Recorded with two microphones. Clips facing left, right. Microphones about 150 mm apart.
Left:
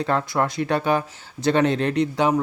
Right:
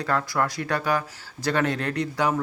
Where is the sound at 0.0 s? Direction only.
20° left (ahead or behind).